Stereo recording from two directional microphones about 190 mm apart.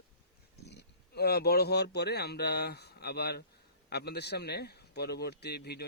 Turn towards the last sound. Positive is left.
turn(degrees=60)  # may be behind; listen again after turning